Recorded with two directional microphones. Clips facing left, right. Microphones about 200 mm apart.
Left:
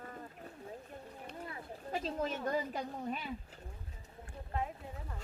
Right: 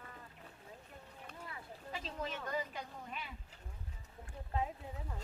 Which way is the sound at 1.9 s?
45° left (ahead or behind).